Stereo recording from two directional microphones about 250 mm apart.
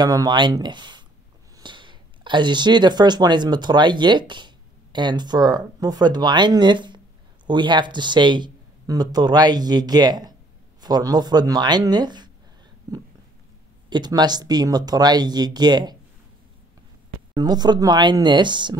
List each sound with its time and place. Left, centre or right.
0.0 s speech: centre
13.8 s speech: centre
17.3 s speech: centre